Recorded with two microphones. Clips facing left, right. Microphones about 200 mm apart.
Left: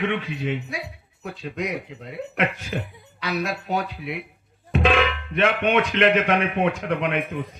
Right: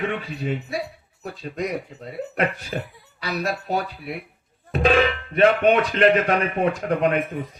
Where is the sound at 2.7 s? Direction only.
40° right (ahead or behind).